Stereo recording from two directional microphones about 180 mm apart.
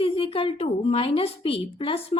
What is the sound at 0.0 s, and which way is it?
A woman's voice, 30° left (ahead or behind).